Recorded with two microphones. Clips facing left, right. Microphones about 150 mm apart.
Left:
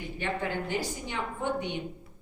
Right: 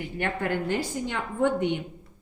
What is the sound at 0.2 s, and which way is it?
Speech, 60° right (ahead or behind).